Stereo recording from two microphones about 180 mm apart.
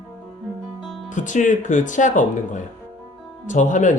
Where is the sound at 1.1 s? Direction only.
45° left (ahead or behind).